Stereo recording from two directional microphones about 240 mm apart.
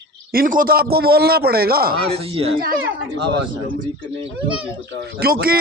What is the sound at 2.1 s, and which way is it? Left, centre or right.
Speech, right.